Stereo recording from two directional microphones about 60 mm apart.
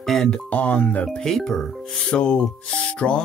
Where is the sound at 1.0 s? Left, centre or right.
Centre.